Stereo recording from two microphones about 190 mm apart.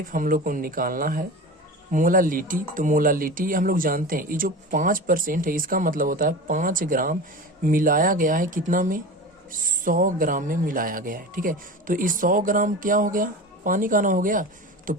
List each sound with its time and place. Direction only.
0.1 s speech: 45° right (ahead or behind)